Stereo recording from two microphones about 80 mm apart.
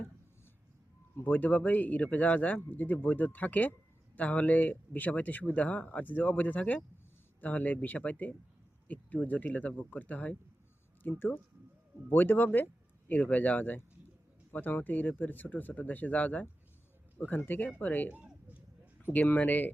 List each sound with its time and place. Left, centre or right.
1.1 s speech: left
18.1 s a sound: right
19.0 s speech: left